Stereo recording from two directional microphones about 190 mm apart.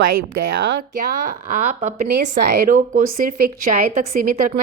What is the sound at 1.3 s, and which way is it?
A woman's voice, 45° right (ahead or behind).